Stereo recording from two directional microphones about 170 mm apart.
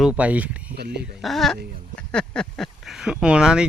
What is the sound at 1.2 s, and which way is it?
Speech, centre (ahead or behind).